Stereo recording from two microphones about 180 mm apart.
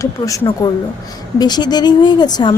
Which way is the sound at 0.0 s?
20° left (ahead or behind).